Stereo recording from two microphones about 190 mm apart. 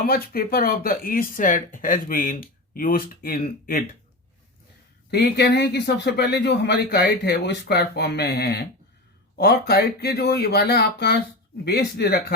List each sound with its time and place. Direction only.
0.0 s speech: 55° left (ahead or behind)
5.1 s a man's voice: 60° left (ahead or behind)